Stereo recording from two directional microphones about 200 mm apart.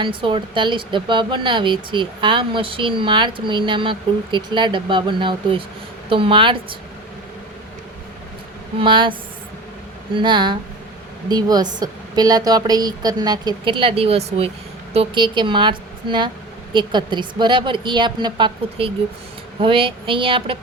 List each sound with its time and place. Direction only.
0.0 s a woman's voice: 25° right (ahead or behind)
8.8 s a woman's voice: 25° right (ahead or behind)
10.2 s a woman's voice: 25° right (ahead or behind)